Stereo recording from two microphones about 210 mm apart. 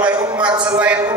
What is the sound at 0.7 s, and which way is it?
Speech, 5° right (ahead or behind).